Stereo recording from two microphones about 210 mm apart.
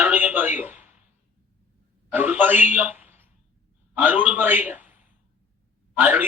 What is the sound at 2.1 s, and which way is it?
A man's voice, 5° right (ahead or behind).